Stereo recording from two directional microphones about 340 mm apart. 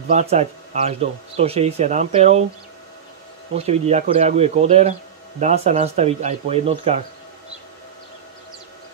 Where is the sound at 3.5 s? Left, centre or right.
Centre.